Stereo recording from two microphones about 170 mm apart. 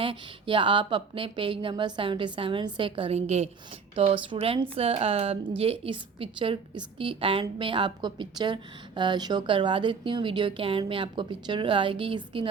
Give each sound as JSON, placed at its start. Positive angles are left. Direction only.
{"t": 0.0, "sound": "a woman's voice", "side_deg": -30}